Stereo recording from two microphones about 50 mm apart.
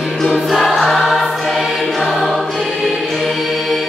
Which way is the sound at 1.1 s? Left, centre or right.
Centre.